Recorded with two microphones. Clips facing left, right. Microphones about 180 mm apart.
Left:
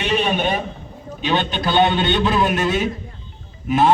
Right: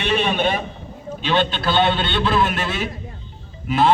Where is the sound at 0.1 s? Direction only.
15° left (ahead or behind).